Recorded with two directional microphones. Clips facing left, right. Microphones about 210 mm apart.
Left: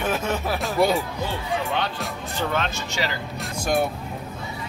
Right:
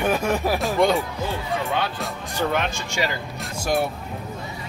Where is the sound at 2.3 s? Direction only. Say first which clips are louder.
Right 2 dB; 15° right (ahead or behind).